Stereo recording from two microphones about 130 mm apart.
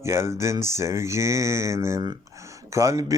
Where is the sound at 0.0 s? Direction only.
20° right (ahead or behind).